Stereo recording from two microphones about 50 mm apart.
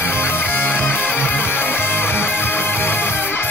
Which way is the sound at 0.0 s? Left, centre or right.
Left.